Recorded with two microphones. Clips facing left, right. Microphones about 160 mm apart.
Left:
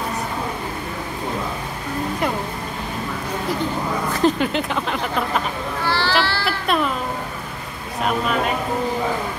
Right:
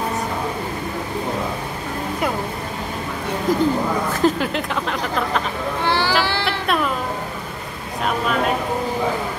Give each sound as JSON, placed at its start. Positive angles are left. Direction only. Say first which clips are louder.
{"t": 4.2, "sound": "speech", "louder": "left 2 dB", "side_deg": 0}
{"t": 5.9, "sound": "children playing", "louder": "right 1 dB", "side_deg": -15}
{"t": 6.4, "sound": "music", "louder": "even", "side_deg": 0}